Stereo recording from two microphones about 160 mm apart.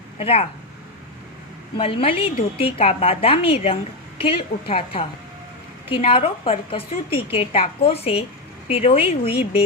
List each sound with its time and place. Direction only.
0.2 s a woman's voice: 35° left (ahead or behind)
1.8 s a woman's voice: 35° left (ahead or behind)
6.1 s a woman's voice: 35° left (ahead or behind)